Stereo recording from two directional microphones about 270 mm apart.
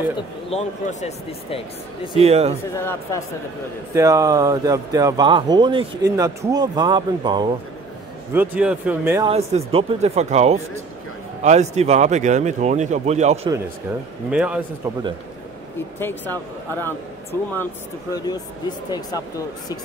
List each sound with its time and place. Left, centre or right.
0.5 s speech: left
2.1 s speech: right
2.8 s speech: centre
3.9 s speech: centre
8.3 s speech: centre
9.3 s speech: right
14.3 s a man's voice: centre
16.0 s speech: centre